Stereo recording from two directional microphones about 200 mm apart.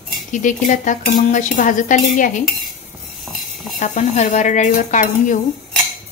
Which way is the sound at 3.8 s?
35° left (ahead or behind).